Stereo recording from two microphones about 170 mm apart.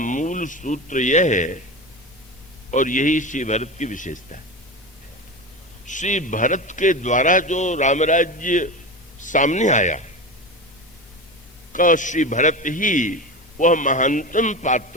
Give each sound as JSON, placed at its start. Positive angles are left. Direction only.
{"t": 0.0, "sound": "a man's voice", "side_deg": 50}
{"t": 2.6, "sound": "a man's voice", "side_deg": 50}
{"t": 5.8, "sound": "a man's voice", "side_deg": 45}
{"t": 11.7, "sound": "a man's voice", "side_deg": 50}